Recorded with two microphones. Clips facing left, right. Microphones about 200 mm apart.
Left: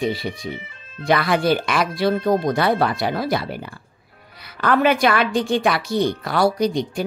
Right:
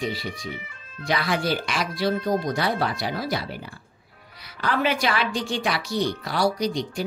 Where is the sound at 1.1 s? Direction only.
55° left (ahead or behind).